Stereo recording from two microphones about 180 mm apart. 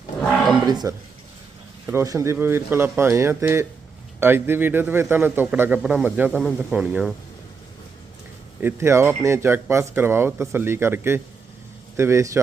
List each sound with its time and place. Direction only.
0.6 s speech: 20° right (ahead or behind)
6.3 s speech: 10° left (ahead or behind)
6.7 s speech: 5° right (ahead or behind)
8.6 s speech: 15° right (ahead or behind)